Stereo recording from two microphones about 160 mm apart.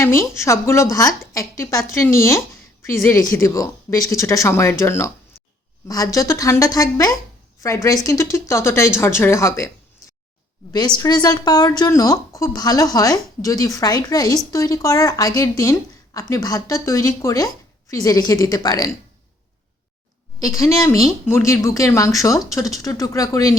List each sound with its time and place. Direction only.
0.0 s speech: 15° left (ahead or behind)
10.7 s speech: 25° left (ahead or behind)
20.5 s speech: 20° left (ahead or behind)